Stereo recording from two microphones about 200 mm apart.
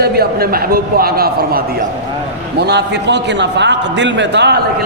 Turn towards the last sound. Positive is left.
turn(degrees=-60)  # may be behind; listen again after turning